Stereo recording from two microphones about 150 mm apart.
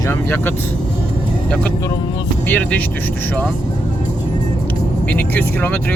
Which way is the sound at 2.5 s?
10° left (ahead or behind).